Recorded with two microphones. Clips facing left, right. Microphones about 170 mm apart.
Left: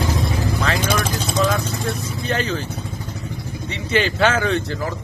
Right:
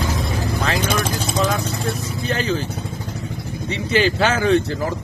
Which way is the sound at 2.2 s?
35° left (ahead or behind).